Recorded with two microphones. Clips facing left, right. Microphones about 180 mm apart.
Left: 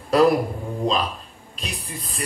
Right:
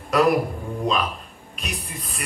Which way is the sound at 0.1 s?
30° left (ahead or behind).